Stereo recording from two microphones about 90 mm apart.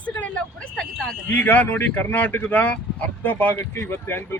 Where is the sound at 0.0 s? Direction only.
15° left (ahead or behind).